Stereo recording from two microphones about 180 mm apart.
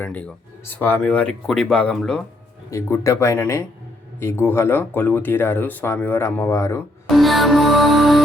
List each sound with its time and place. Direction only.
0.0 s speech: 10° left (ahead or behind)
2.6 s speech: 15° left (ahead or behind)
7.1 s music: centre (ahead or behind)